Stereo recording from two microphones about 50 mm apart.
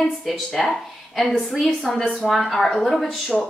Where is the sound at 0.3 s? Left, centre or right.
Centre.